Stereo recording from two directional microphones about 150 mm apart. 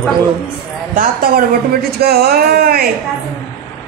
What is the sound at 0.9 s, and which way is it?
A woman's voice, 75° right (ahead or behind).